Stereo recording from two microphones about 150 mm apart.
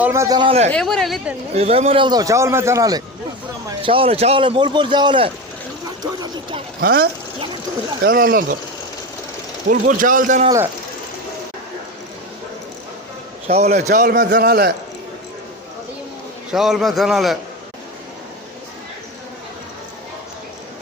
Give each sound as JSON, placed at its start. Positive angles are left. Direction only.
{"t": 0.0, "sound": "a man's voice", "side_deg": -20}
{"t": 0.3, "sound": "a man's voice", "side_deg": -40}
{"t": 0.7, "sound": "a man's voice", "side_deg": 5}
{"t": 1.5, "sound": "a man's voice", "side_deg": -45}
{"t": 3.8, "sound": "a man's voice", "side_deg": -35}
{"t": 6.8, "sound": "speech", "side_deg": -80}
{"t": 9.6, "sound": "a man's voice", "side_deg": -65}
{"t": 13.5, "sound": "a man's voice", "side_deg": -45}
{"t": 16.5, "sound": "a man's voice", "side_deg": 0}